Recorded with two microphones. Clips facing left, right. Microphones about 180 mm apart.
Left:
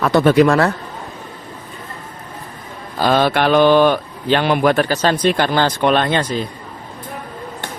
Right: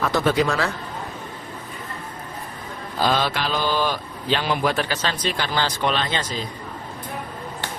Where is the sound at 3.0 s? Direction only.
55° left (ahead or behind).